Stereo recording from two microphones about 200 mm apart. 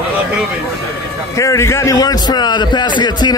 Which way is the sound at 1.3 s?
15° left (ahead or behind).